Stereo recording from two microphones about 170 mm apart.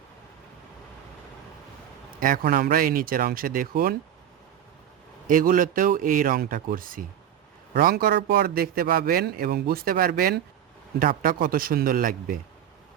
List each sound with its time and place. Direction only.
2.2 s a man's voice: 55° right (ahead or behind)
5.3 s a man's voice: 55° right (ahead or behind)